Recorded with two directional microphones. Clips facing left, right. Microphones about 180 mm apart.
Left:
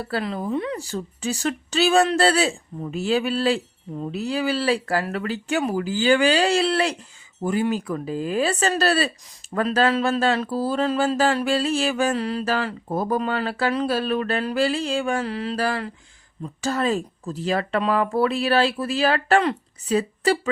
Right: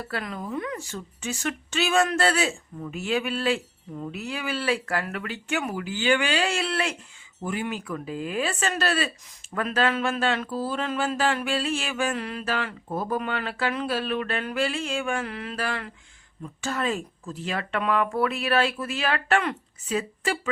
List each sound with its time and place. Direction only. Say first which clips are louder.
0.0 s speech: left 6 dB; 30° left (ahead or behind)